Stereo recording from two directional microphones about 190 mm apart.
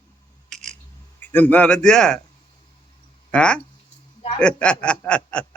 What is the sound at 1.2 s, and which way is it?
Speech, 10° left (ahead or behind).